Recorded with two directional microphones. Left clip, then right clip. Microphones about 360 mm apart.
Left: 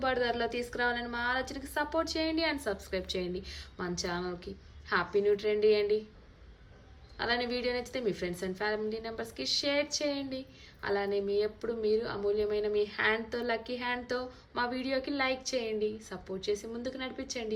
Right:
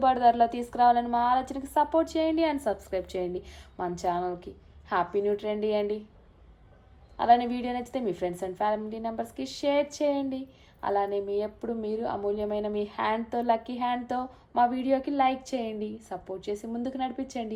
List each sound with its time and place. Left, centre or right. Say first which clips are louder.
0.0 s speech: right 9 dB; centre
7.2 s speech: right 9 dB; centre